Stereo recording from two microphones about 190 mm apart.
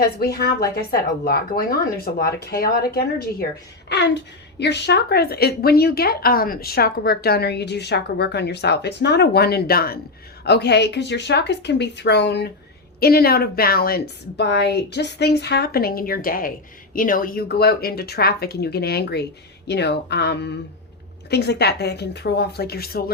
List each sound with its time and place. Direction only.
0.0 s a woman's voice: 55° left (ahead or behind)
3.8 s speech: 65° left (ahead or behind)
13.0 s a woman's voice: 55° left (ahead or behind)